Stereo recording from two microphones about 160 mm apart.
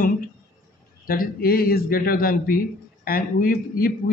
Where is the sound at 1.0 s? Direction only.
65° left (ahead or behind).